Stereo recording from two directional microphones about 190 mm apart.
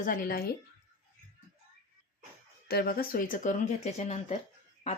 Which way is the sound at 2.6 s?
55° left (ahead or behind).